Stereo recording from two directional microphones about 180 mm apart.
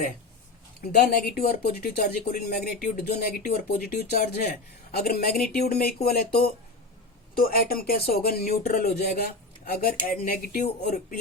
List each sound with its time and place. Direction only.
0.9 s speech: 55° left (ahead or behind)